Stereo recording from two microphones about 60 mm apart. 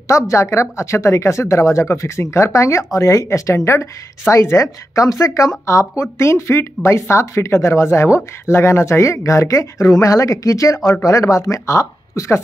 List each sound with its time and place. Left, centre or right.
0.1 s speech: left